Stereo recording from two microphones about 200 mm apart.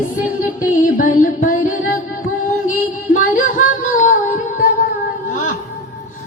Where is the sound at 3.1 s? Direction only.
40° left (ahead or behind).